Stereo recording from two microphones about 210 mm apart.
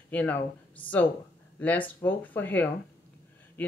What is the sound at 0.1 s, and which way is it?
Speech, 10° left (ahead or behind).